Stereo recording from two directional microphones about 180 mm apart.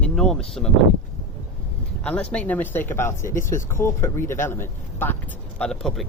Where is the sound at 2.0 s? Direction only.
5° left (ahead or behind).